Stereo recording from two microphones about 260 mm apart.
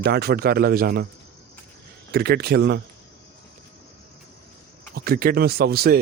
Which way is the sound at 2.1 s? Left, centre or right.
Right.